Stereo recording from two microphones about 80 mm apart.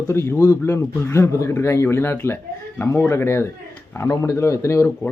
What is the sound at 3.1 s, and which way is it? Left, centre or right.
Speech, left.